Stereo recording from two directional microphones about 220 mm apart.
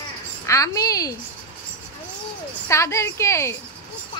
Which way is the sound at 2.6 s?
15° left (ahead or behind).